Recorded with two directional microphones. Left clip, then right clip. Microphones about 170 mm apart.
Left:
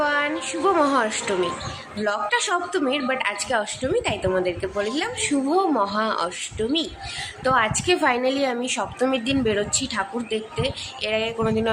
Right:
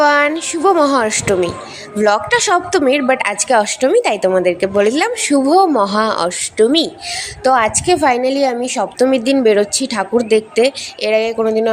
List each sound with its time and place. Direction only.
0.0 s a sound: 50° right (ahead or behind)
0.9 s a woman's voice: 40° right (ahead or behind)
7.4 s a woman's voice: 35° right (ahead or behind)